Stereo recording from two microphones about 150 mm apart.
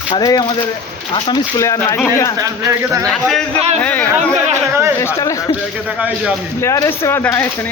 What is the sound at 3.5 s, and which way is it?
Speech, 45° right (ahead or behind).